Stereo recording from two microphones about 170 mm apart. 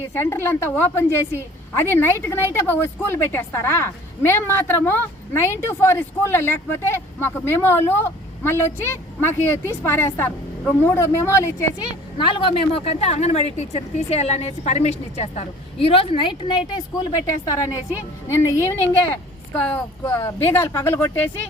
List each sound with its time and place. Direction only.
0.1 s a woman's voice: 15° left (ahead or behind)
12.1 s a woman's voice: 30° left (ahead or behind); by 21.4 s 10° left (ahead or behind)